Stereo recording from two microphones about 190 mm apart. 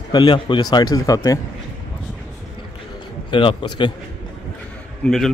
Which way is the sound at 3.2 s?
25° left (ahead or behind).